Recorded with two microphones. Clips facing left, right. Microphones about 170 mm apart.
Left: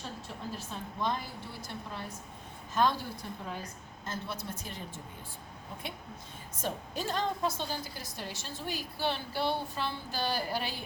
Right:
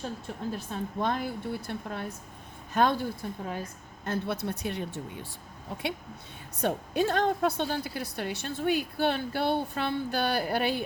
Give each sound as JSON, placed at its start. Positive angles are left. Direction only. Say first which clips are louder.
{"t": 0.5, "sound": "a woman's voice", "louder": "right 7 dB", "side_deg": -55}
{"t": 6.6, "sound": "a woman's voice", "louder": "right 9 dB", "side_deg": -60}